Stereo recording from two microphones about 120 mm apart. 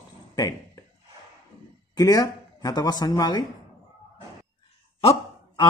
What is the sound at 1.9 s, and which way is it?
Speech, 30° left (ahead or behind).